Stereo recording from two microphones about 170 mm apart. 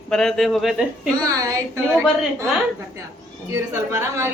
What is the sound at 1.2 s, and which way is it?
Speech, 20° right (ahead or behind).